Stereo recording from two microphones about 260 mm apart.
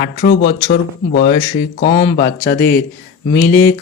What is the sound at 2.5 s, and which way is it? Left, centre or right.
Speech, left.